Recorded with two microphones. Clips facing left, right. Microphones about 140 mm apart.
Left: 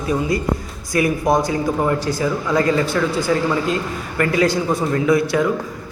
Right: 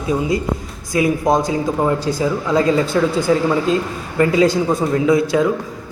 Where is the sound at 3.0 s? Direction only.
10° right (ahead or behind).